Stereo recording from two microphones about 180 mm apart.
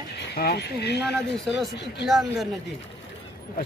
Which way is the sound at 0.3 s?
65° left (ahead or behind).